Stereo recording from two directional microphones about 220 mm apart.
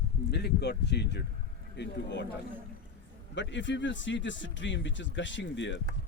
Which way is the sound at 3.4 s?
55° left (ahead or behind).